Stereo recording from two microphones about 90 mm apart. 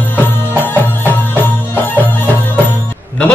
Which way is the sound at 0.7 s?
20° left (ahead or behind).